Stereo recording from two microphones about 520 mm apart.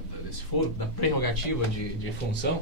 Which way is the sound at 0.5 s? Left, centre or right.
Left.